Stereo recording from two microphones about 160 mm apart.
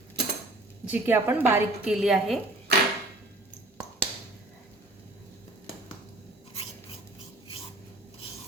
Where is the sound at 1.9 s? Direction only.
Centre (ahead or behind).